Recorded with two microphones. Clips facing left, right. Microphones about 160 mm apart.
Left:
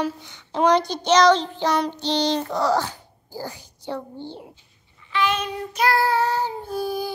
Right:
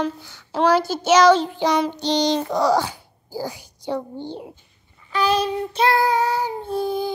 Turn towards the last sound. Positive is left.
turn(degrees=-25)  # may be behind; listen again after turning